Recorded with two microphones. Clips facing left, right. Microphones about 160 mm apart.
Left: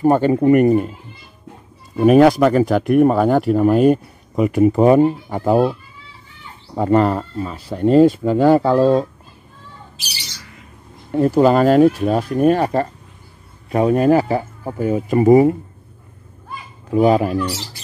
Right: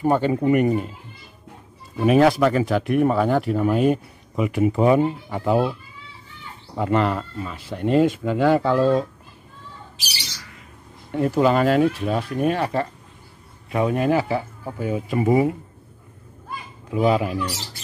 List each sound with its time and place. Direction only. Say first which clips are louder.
0.0 s speech: left 5 dB; 45° left (ahead or behind)
2.0 s speech: left 5 dB; 40° left (ahead or behind)
11.1 s speech: left 5 dB; 35° left (ahead or behind)
16.9 s speech: left 5 dB; 45° left (ahead or behind)